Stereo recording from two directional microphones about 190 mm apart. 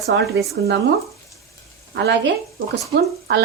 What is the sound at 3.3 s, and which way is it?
Speech, 55° right (ahead or behind).